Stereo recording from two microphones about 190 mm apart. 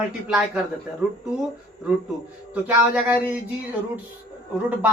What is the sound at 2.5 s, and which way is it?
Speech, 5° right (ahead or behind).